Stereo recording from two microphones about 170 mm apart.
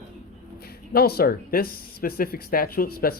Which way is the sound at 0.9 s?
65° left (ahead or behind).